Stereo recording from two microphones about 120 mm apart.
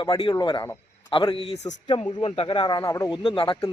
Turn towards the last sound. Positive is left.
turn(degrees=45)  # may be behind; listen again after turning